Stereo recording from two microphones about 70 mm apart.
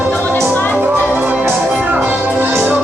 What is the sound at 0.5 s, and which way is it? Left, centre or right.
Music, left.